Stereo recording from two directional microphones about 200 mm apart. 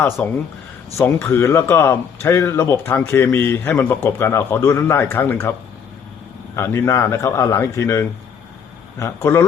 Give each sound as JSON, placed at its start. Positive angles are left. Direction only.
{"t": 0.2, "sound": "speech", "side_deg": 5}
{"t": 6.6, "sound": "speech", "side_deg": 15}